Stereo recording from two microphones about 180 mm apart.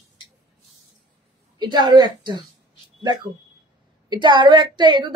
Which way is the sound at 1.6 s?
25° right (ahead or behind).